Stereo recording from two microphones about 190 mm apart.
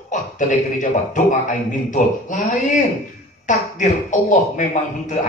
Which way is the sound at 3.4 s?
40° left (ahead or behind).